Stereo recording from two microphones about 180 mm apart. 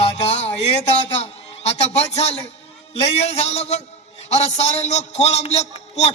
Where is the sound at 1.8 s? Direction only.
35° left (ahead or behind).